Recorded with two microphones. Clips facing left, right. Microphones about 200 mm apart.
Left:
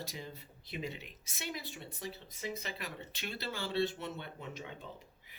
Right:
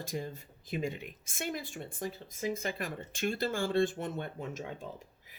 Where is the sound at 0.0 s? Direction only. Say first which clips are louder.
Right 7 dB; 50° right (ahead or behind).